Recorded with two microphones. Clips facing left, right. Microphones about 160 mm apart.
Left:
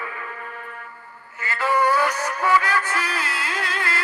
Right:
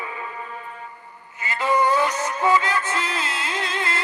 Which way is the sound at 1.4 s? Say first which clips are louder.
Even; 20° right (ahead or behind).